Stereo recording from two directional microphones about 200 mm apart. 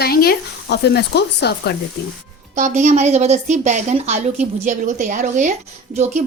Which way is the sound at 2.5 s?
35° right (ahead or behind).